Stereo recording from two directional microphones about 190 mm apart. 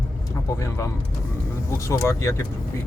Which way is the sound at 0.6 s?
15° left (ahead or behind).